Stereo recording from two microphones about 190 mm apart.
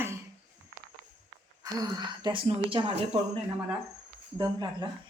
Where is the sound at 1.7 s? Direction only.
20° right (ahead or behind).